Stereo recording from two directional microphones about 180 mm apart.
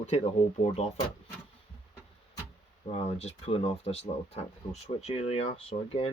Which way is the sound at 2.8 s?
35° left (ahead or behind).